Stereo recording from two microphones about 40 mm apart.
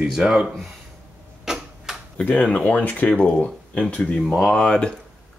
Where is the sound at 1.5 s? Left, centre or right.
Centre.